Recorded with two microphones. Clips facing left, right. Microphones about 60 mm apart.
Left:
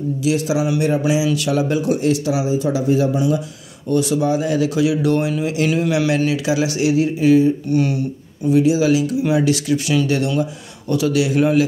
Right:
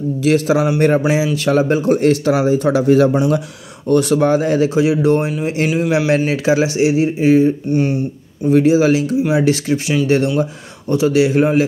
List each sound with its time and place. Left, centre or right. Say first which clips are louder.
0.2 s a man's voice: right 5 dB; right
8.5 s a man's voice: right 3 dB; right